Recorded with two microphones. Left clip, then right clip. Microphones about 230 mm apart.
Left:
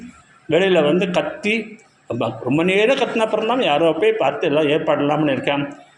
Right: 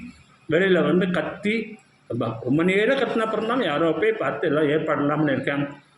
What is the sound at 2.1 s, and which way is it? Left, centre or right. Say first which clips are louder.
A man's voice: left 4 dB; left.